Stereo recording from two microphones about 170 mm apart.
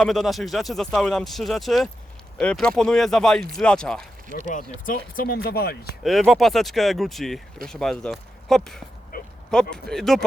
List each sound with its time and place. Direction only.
0.0 s speech: centre (ahead or behind)
4.5 s speech: 50° left (ahead or behind); by 6.0 s 65° left (ahead or behind)
6.0 s speech: centre (ahead or behind)
9.1 s a sound: 55° left (ahead or behind)
9.5 s speech: 5° left (ahead or behind)